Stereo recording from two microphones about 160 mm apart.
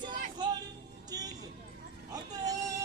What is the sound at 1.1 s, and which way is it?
Vehicle, 25° right (ahead or behind).